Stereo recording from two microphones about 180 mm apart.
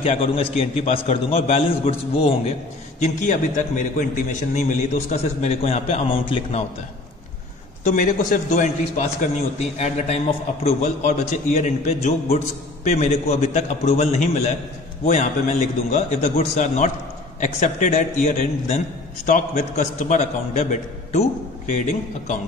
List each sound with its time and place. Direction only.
0.0 s a man's voice: 35° left (ahead or behind)
7.8 s a man's voice: 50° left (ahead or behind)
15.9 s a man's voice: 40° left (ahead or behind)